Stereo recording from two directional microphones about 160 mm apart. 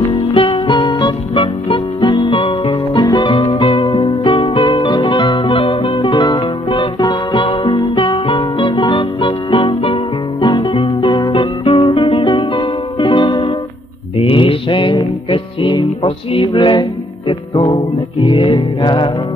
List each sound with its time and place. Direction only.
0.1 s music: 35° left (ahead or behind)